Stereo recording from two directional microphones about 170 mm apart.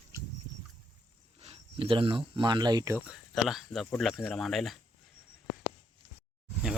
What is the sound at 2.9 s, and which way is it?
Speech, 5° right (ahead or behind).